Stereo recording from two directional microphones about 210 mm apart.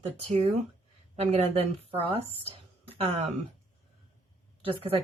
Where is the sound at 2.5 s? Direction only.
30° right (ahead or behind).